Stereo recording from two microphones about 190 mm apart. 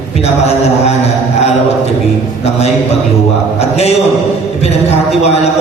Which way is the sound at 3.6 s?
35° left (ahead or behind).